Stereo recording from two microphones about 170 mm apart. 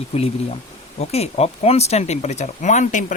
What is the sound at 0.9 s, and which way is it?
Speech, 40° left (ahead or behind).